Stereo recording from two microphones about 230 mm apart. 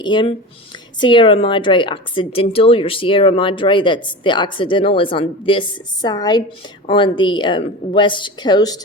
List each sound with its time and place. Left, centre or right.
0.0 s a woman's voice: left